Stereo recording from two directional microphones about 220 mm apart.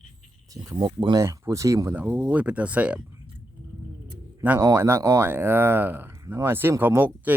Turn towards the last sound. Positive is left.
turn(degrees=-10)  # may be behind; listen again after turning